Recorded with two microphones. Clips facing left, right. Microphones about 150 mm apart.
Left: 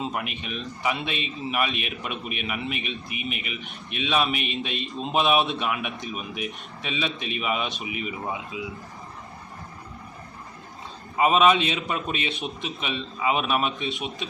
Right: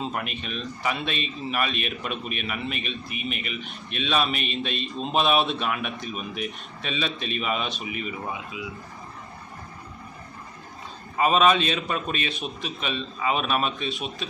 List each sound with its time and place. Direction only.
0.0 s a man's voice: 15° left (ahead or behind)
11.2 s a man's voice: 15° left (ahead or behind)